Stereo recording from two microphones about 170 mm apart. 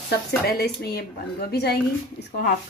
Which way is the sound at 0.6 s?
70° left (ahead or behind).